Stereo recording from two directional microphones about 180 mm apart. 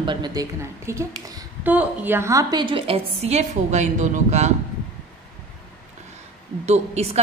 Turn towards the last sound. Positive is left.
turn(degrees=-35)  # may be behind; listen again after turning